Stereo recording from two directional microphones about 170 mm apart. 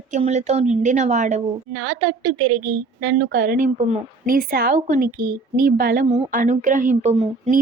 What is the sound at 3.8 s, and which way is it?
A woman's voice, 45° right (ahead or behind).